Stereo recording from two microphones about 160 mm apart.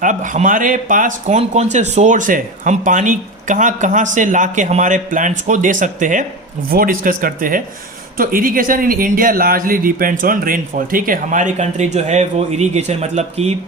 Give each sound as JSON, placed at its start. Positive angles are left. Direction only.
{"t": 0.0, "sound": "speech", "side_deg": -55}
{"t": 6.7, "sound": "speech", "side_deg": -65}